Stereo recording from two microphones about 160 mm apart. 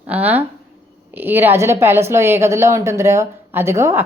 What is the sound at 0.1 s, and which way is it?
A woman's voice, 10° right (ahead or behind).